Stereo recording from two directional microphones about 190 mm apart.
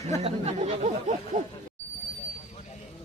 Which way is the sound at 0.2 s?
35° right (ahead or behind).